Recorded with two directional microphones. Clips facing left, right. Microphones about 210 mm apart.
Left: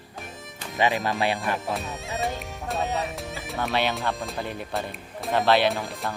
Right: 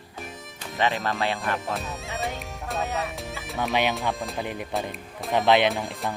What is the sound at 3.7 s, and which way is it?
Speech, 15° right (ahead or behind).